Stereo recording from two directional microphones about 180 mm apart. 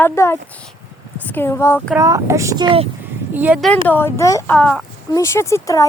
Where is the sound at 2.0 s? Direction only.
20° right (ahead or behind).